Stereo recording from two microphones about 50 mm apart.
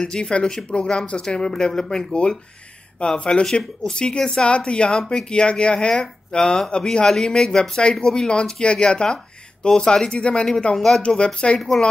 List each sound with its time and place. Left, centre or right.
0.0 s speech: centre